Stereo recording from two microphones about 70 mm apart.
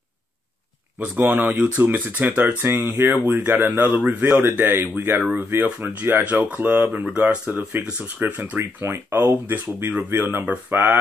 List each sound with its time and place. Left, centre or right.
0.9 s speech: right
10.4 s speech: centre